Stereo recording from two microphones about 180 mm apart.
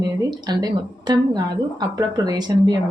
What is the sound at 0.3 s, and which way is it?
A woman's voice, 25° right (ahead or behind).